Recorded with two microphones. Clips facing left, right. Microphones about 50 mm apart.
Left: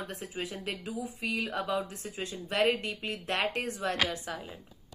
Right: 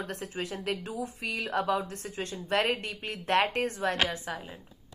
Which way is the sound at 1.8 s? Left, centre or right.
Right.